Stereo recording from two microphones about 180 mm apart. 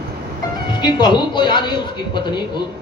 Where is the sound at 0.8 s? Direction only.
25° left (ahead or behind).